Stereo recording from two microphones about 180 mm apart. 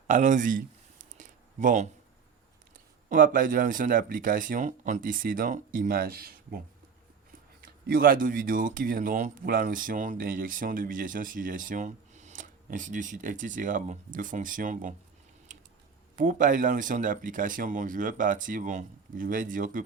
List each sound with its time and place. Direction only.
0.1 s speech: 45° right (ahead or behind)
1.1 s a sound: 45° right (ahead or behind)
2.7 s speech: 50° right (ahead or behind)
7.6 s speech: 55° right (ahead or behind)
15.5 s a sound: 45° right (ahead or behind)
16.1 s speech: 45° right (ahead or behind)